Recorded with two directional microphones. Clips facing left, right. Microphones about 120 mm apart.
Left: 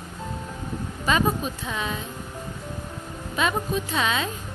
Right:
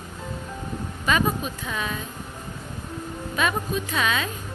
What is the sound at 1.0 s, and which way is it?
Speech, 25° left (ahead or behind).